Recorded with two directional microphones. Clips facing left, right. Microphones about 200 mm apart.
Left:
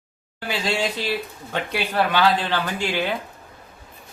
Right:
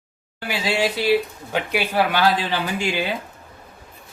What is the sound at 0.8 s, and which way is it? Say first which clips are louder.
Speech: right 6 dB; 10° right (ahead or behind).